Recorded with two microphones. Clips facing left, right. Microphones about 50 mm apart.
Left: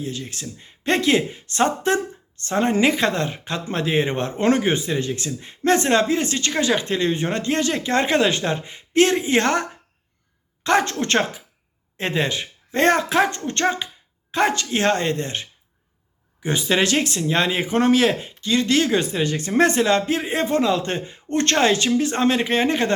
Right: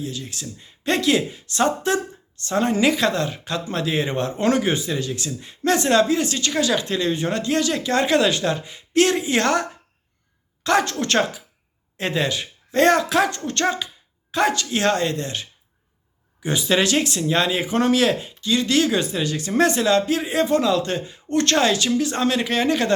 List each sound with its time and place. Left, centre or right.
0.0 s speech: left